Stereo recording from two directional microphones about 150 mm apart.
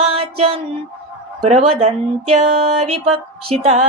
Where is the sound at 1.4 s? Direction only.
45° right (ahead or behind).